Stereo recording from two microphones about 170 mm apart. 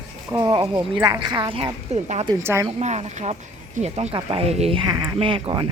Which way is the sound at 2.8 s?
40° right (ahead or behind).